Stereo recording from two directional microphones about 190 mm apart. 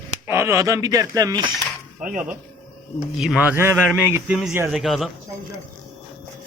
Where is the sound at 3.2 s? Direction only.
5° right (ahead or behind).